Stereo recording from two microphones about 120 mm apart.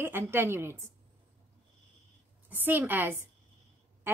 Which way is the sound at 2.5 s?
15° right (ahead or behind).